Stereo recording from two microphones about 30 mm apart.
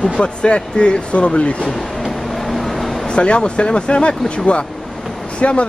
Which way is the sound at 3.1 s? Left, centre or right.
Left.